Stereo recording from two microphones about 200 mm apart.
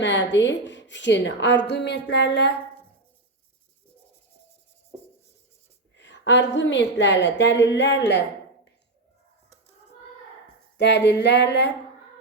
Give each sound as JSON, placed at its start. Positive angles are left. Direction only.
{"t": 0.0, "sound": "a woman's voice", "side_deg": 60}
{"t": 6.0, "sound": "a woman's voice", "side_deg": 60}
{"t": 10.8, "sound": "a woman's voice", "side_deg": 60}